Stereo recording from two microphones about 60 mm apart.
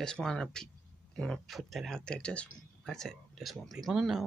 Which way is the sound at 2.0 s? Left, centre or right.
Centre.